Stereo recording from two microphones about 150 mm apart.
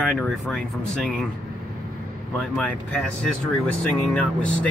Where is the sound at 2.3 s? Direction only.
5° left (ahead or behind).